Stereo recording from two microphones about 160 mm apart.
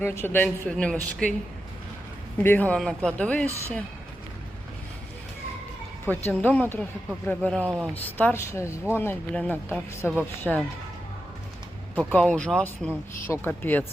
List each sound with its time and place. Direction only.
0.0 s speech: 15° left (ahead or behind)
2.4 s speech: 10° left (ahead or behind)
6.1 s speech: 10° left (ahead or behind)
10.5 s speech: centre (ahead or behind)
11.9 s speech: 5° left (ahead or behind)